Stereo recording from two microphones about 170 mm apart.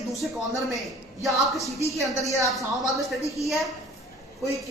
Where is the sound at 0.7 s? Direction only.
Centre (ahead or behind).